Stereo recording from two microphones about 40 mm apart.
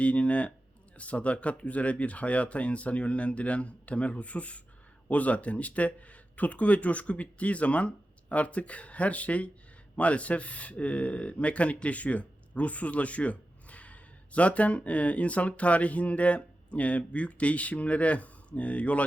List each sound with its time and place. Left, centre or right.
0.0 s speech: left